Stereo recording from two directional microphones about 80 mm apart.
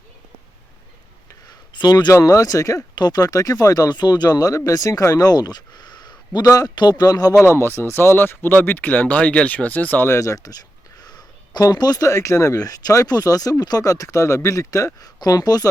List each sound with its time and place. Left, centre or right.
1.5 s a sound: left
2.1 s speech: left
2.9 s speech: left
7.4 s speech: left
10.2 s speech: left
11.0 s a sound: left
11.6 s speech: left